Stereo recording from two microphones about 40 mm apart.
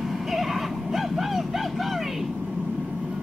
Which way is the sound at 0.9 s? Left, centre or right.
Centre.